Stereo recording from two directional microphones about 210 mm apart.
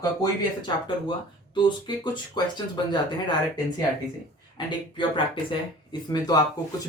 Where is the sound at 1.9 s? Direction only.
20° left (ahead or behind).